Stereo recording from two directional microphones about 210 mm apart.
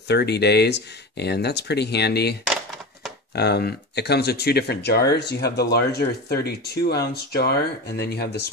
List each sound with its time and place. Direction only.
0.1 s speech: 50° left (ahead or behind)
2.4 s a sound: centre (ahead or behind)
3.3 s speech: 50° left (ahead or behind)